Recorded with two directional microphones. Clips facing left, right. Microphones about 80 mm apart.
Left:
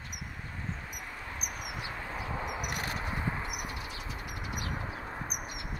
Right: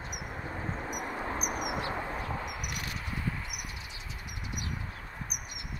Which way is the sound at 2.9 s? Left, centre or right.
Left.